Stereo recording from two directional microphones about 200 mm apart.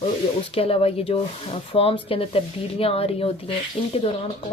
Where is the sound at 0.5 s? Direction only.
30° left (ahead or behind).